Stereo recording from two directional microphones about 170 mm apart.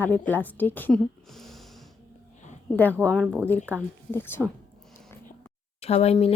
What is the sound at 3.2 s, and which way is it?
Speech, 10° right (ahead or behind).